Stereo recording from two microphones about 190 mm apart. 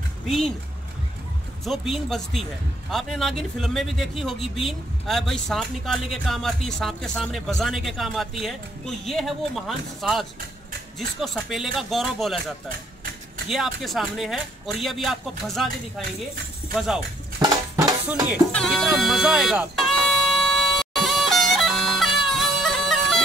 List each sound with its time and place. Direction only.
1.6 s speech: centre (ahead or behind)
13.5 s speech: centre (ahead or behind)
16.7 s speech: centre (ahead or behind)
17.4 s dishes: 20° right (ahead or behind)
18.0 s music: 10° right (ahead or behind)
18.5 s music: 5° left (ahead or behind)